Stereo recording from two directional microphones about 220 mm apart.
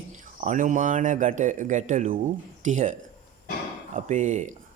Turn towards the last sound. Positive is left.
turn(degrees=-35)  # may be behind; listen again after turning